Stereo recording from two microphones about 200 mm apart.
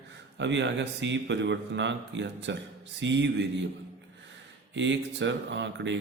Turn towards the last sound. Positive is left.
turn(degrees=-65)  # may be behind; listen again after turning